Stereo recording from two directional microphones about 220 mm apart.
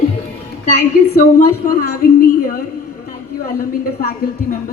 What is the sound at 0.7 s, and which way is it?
A woman's voice, 45° left (ahead or behind).